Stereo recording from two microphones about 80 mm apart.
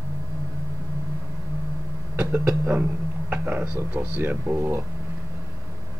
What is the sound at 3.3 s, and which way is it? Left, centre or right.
Speech, right.